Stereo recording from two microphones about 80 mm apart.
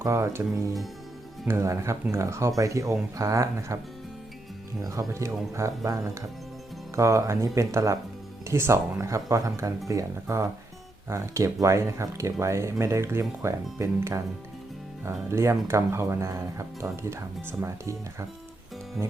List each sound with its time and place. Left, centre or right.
0.0 s speech: right
4.8 s speech: right